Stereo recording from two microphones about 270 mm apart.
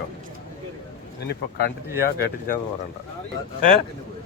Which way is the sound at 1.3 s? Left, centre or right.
Left.